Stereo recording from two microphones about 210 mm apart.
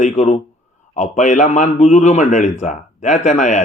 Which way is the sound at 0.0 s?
35° left (ahead or behind).